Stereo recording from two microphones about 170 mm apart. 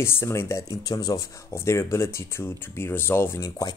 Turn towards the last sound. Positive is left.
turn(degrees=20)  # may be behind; listen again after turning